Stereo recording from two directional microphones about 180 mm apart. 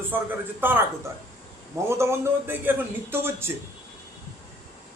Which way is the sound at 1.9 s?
15° right (ahead or behind).